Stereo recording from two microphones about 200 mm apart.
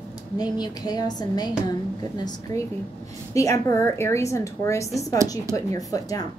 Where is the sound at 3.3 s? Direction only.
15° left (ahead or behind).